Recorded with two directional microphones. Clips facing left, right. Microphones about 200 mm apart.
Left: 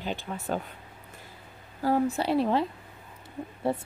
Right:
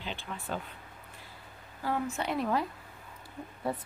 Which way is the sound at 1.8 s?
40° left (ahead or behind).